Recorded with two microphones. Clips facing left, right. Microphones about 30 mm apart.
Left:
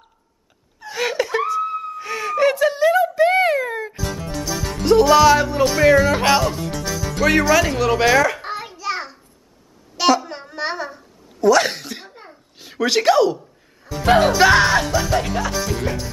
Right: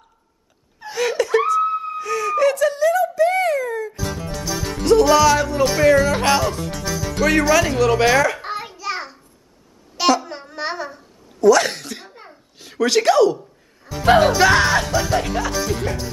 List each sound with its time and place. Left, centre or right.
0.9 s laughter: centre
1.6 s a sound: centre
2.0 s wail: left
3.9 s music: centre
5.1 s music: centre
5.9 s speech: centre
9.9 s babbling: centre
12.5 s speech: centre
13.4 s a sound: centre
14.4 s music: centre